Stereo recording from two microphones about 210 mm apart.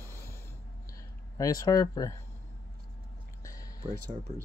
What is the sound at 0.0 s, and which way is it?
Snort, 10° left (ahead or behind).